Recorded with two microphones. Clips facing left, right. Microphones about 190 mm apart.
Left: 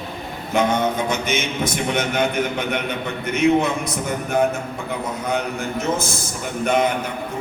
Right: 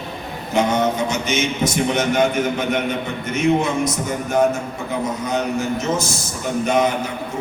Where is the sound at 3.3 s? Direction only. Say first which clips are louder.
Even; 60° left (ahead or behind).